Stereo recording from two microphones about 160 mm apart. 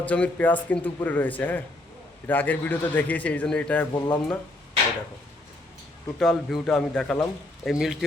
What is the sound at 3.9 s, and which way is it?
Speech, 25° left (ahead or behind).